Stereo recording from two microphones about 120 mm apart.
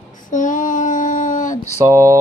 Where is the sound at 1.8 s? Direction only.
25° right (ahead or behind).